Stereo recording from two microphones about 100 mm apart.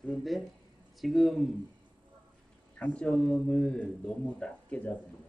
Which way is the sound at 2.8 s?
15° left (ahead or behind).